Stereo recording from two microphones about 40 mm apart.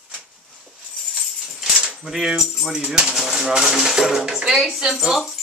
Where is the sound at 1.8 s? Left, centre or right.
Centre.